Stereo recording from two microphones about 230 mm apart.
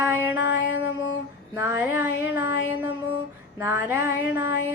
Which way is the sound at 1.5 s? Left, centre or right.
Centre.